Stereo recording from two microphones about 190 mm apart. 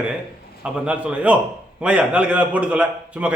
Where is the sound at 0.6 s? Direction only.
5° right (ahead or behind).